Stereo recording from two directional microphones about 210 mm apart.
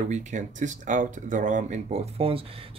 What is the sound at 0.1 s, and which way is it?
Speech, 35° right (ahead or behind).